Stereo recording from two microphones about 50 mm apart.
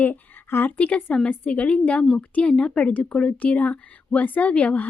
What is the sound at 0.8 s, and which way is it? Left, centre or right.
A woman's voice, left.